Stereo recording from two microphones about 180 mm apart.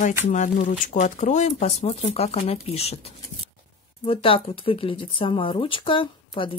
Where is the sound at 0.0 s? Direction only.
40° left (ahead or behind).